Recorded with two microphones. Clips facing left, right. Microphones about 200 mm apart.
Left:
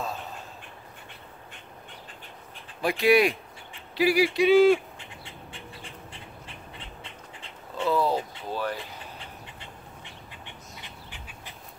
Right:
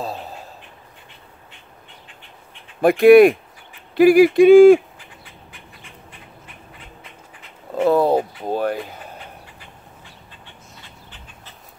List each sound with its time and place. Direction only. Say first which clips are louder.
0.0 s duck: right 5 dB; 35° right (ahead or behind)
2.8 s speech: right 12 dB; 55° right (ahead or behind)
4.9 s bird: left 1 dB; 25° left (ahead or behind)
7.8 s a sound: right 9 dB; 55° right (ahead or behind)
9.6 s duck: even; 20° left (ahead or behind)